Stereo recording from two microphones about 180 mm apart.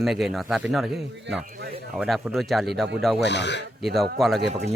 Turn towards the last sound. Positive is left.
turn(degrees=0)  # may be behind; listen again after turning